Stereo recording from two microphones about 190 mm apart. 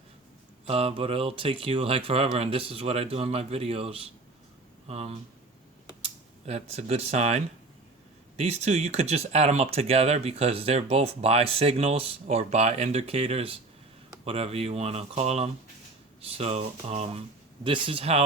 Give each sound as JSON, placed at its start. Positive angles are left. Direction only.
{"t": 0.7, "sound": "speech", "side_deg": -30}